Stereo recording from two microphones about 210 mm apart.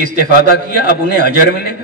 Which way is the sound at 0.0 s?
45° left (ahead or behind).